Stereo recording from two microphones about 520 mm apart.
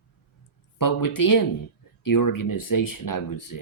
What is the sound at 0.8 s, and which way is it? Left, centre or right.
Speech, left.